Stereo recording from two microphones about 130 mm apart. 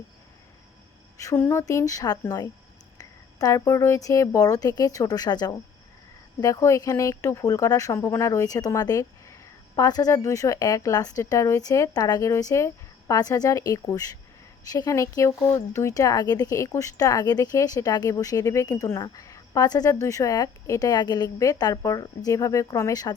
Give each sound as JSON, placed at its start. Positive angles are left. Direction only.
{"t": 1.2, "sound": "speech", "side_deg": 20}
{"t": 3.0, "sound": "a sound", "side_deg": 30}
{"t": 3.6, "sound": "speech", "side_deg": 20}